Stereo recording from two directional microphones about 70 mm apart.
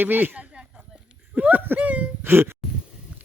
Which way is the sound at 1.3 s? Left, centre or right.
Right.